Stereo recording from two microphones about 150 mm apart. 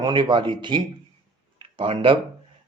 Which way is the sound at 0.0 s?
30° right (ahead or behind).